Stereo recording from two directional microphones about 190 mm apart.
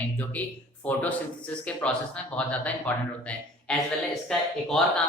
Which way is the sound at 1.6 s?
5° left (ahead or behind).